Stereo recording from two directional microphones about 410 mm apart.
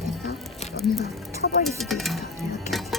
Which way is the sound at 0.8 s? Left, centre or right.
Centre.